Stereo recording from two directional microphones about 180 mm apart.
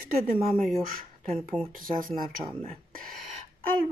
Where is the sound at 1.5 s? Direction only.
5° right (ahead or behind).